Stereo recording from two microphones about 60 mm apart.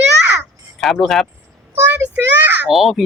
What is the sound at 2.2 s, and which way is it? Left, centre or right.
Speech, right.